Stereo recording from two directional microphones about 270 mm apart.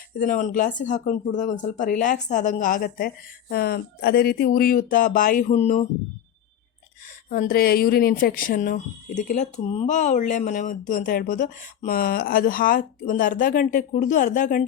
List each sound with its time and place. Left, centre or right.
0.2 s speech: left
7.3 s speech: left